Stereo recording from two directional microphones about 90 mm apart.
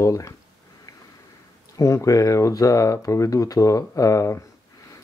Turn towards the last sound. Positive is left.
turn(degrees=35)  # may be behind; listen again after turning